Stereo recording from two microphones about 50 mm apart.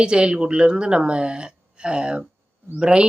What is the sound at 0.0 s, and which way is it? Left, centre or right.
Speech, centre.